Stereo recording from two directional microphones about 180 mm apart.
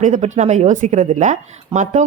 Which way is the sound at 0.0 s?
40° right (ahead or behind).